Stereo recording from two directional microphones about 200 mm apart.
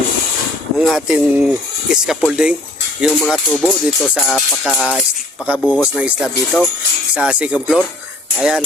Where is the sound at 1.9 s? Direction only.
5° right (ahead or behind).